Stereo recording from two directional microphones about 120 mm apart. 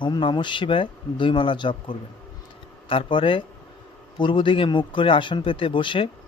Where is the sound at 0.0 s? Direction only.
40° left (ahead or behind).